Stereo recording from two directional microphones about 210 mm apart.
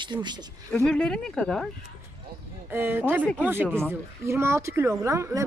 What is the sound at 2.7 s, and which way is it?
Speech, 10° right (ahead or behind).